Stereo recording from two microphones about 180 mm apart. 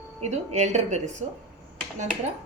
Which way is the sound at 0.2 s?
40° right (ahead or behind).